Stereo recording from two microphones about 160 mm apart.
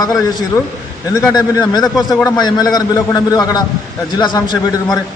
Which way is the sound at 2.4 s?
25° left (ahead or behind).